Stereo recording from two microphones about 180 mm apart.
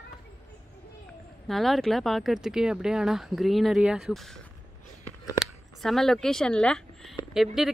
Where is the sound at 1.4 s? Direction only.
Centre (ahead or behind).